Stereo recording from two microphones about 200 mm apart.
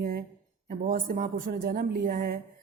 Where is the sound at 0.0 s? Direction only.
50° right (ahead or behind).